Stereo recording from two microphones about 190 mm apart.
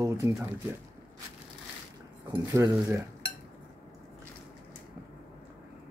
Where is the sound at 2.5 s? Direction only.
15° right (ahead or behind).